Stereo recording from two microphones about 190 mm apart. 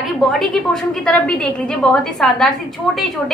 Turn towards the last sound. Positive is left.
turn(degrees=0)  # may be behind; listen again after turning